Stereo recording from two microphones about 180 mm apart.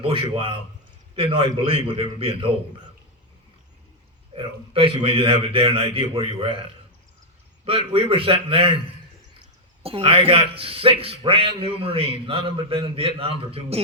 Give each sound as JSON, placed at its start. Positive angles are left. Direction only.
{"t": 0.0, "sound": "a man's voice", "side_deg": -30}
{"t": 4.4, "sound": "a man's voice", "side_deg": -30}
{"t": 9.8, "sound": "a man's voice", "side_deg": -30}